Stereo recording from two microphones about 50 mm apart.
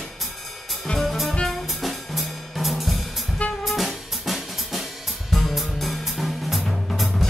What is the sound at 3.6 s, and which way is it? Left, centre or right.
Drum kit, centre.